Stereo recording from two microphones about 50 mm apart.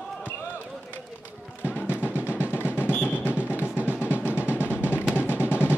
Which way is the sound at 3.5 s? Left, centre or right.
Left.